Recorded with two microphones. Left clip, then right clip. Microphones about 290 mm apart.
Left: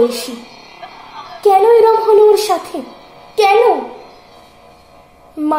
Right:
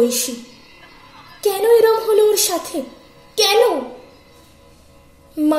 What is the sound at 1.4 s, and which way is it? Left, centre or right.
A woman's voice, left.